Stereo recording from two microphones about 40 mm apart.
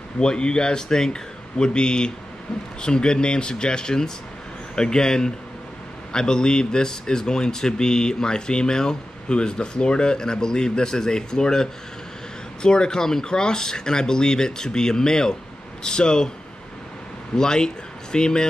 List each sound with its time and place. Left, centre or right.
0.2 s speech: left
17.4 s speech: centre